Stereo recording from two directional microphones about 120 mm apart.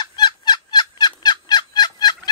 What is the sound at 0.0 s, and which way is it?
Fowl, 35° left (ahead or behind).